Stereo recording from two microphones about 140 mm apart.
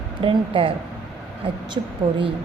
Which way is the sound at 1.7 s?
35° right (ahead or behind).